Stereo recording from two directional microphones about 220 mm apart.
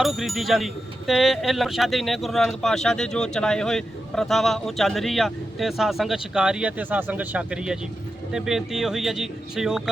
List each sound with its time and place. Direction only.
0.0 s speech: centre (ahead or behind)